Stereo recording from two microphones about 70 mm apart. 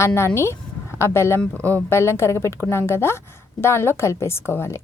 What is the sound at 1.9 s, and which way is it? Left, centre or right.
Speech, left.